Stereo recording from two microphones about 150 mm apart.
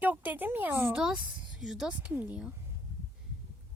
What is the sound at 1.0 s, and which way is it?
Speech, 5° right (ahead or behind).